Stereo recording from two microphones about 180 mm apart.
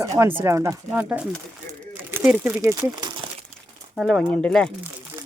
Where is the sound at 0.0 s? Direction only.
15° right (ahead or behind).